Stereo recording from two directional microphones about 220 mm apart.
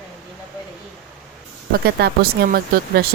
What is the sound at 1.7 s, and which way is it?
Speech, 45° right (ahead or behind).